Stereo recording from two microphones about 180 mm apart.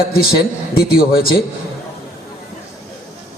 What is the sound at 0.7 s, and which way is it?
Speech, 55° left (ahead or behind).